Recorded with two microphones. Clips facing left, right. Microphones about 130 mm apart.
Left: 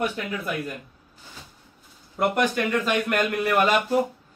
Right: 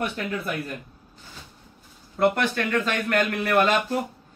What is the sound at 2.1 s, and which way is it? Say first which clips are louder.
Speech: right 1 dB; 15° left (ahead or behind).